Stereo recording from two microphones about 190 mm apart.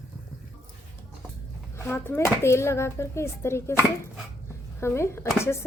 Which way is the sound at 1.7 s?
15° left (ahead or behind).